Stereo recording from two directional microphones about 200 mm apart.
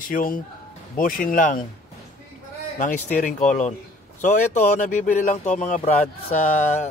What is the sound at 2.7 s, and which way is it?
Speech, 40° left (ahead or behind).